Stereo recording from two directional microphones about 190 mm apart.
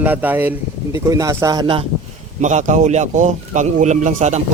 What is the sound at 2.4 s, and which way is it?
Speech, 40° right (ahead or behind).